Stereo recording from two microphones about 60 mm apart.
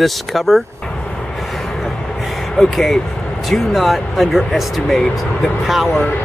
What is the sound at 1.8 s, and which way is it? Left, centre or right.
Speech, centre.